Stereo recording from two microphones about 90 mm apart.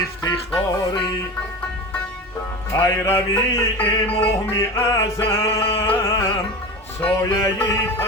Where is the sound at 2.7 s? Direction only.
30° left (ahead or behind).